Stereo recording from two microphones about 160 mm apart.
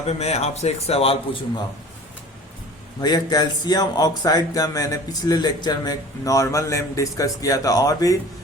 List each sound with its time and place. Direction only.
0.1 s a man's voice: 40° left (ahead or behind)
3.0 s speech: 25° left (ahead or behind)